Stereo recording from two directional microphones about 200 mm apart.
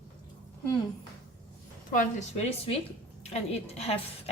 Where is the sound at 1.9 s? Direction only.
40° left (ahead or behind).